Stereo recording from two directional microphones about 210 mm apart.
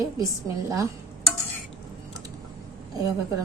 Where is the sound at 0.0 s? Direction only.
15° right (ahead or behind).